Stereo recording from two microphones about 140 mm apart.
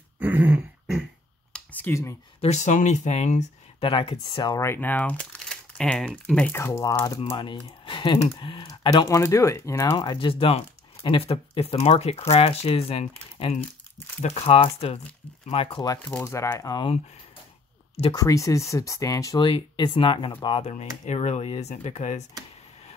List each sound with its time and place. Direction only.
0.2 s throat clearing: 10° right (ahead or behind)
1.5 s a sound: 10° left (ahead or behind)
2.4 s speech: 55° left (ahead or behind)
3.8 s speech: 40° left (ahead or behind)
4.6 s speech: 15° left (ahead or behind)
6.5 s speech: 20° left (ahead or behind)
7.3 s speech: 35° left (ahead or behind)
9.1 s speech: 20° left (ahead or behind)
9.9 s speech: 35° left (ahead or behind)
16.0 s speech: 15° left (ahead or behind)
18.1 s speech: 25° left (ahead or behind)
19.4 s speech: 35° left (ahead or behind)
20.6 s speech: 55° left (ahead or behind)